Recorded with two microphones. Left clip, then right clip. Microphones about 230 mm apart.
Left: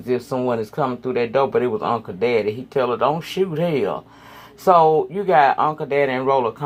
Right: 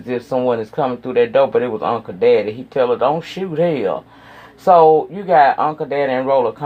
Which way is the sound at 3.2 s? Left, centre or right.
Left.